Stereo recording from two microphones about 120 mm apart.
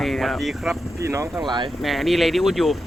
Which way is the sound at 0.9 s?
25° right (ahead or behind).